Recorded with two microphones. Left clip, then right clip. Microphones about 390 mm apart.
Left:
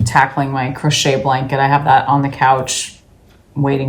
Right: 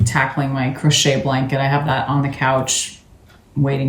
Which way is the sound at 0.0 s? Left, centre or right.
Centre.